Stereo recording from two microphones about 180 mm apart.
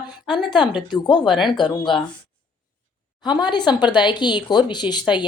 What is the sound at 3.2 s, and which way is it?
Speech, 25° left (ahead or behind).